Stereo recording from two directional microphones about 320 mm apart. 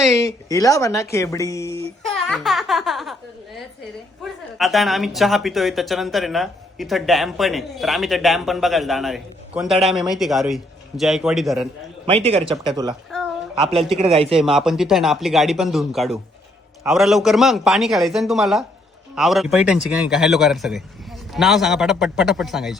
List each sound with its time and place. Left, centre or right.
0.2 s speech: centre
12.0 s speech: centre
13.1 s a sound: centre
13.6 s speech: centre
14.3 s speech: centre